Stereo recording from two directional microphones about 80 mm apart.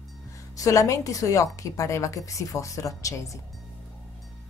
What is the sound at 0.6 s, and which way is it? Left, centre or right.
Speech, left.